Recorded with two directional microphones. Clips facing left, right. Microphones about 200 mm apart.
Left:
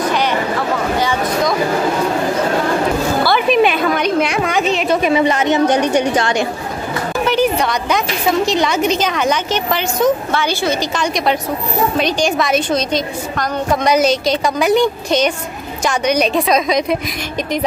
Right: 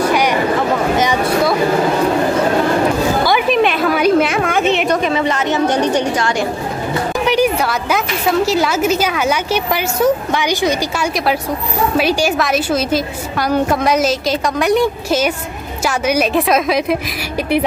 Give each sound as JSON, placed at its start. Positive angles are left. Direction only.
{"t": 0.0, "sound": "a sound", "side_deg": -10}
{"t": 3.4, "sound": "a woman's voice", "side_deg": 0}
{"t": 4.8, "sound": "a woman's voice", "side_deg": 10}
{"t": 7.2, "sound": "a woman's voice", "side_deg": -10}